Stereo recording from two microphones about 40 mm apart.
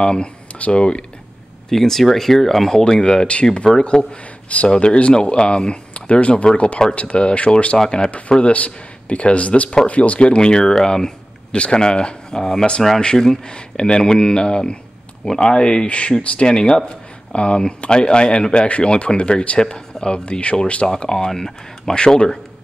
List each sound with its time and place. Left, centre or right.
0.0 s speech: left
1.7 s speech: centre
2.8 s speech: centre
8.4 s speech: left; by 11.1 s centre
11.5 s speech: left
13.1 s speech: centre
13.5 s speech: left
20.9 s speech: centre